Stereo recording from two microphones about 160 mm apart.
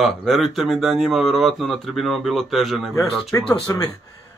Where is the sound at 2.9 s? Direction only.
20° left (ahead or behind).